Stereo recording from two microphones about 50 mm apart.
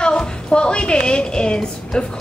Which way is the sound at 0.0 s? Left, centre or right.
Centre.